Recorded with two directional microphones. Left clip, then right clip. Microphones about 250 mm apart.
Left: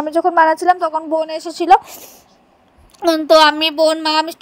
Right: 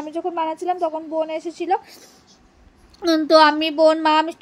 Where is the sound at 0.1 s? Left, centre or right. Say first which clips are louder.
Left 12 dB; left.